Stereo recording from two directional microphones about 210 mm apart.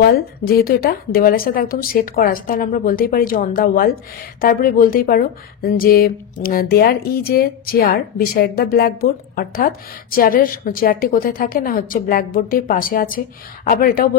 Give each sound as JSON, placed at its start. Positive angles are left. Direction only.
{"t": 0.0, "sound": "speech", "side_deg": 45}